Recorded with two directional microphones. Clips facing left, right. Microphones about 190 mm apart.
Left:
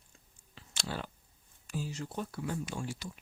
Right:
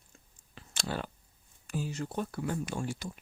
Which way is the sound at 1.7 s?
55° right (ahead or behind).